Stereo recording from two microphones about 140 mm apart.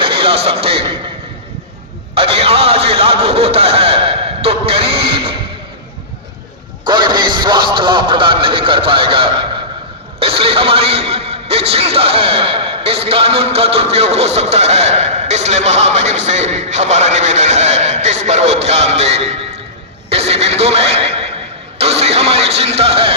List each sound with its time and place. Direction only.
0.0 s a man's voice: 40° right (ahead or behind)
2.1 s a sound: 45° right (ahead or behind)
6.8 s a man's voice: 35° right (ahead or behind)